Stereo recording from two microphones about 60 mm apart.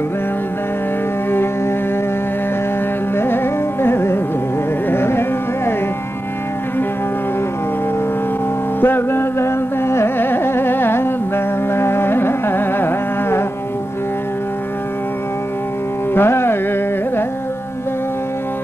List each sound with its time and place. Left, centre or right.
3.2 s carnatic music: left
8.8 s carnatic music: left
16.1 s music: left